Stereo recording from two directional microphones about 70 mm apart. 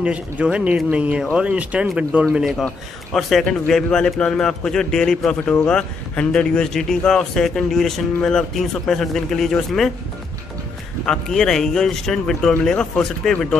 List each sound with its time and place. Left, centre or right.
0.0 s speech: centre
0.8 s speech: right
1.3 s speech: centre
3.1 s a man's voice: centre
11.1 s a man's voice: centre